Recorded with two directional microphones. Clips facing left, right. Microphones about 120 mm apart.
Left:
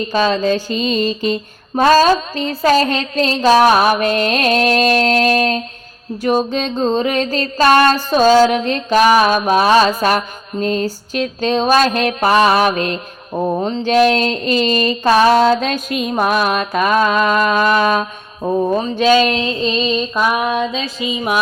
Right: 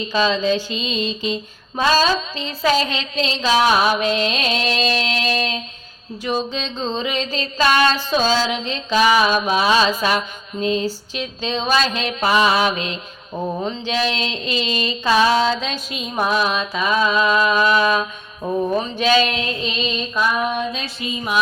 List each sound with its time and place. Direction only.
0.0 s music: 50° left (ahead or behind)
13.5 s music: 35° left (ahead or behind)
18.4 s a sound: 35° left (ahead or behind)
20.2 s female singing: 75° left (ahead or behind)
21.1 s music: 90° left